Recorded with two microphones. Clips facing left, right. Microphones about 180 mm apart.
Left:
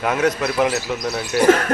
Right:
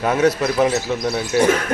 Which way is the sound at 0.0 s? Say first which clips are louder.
Right 3 dB; 30° right (ahead or behind).